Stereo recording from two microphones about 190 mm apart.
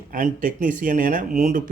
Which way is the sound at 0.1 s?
45° right (ahead or behind).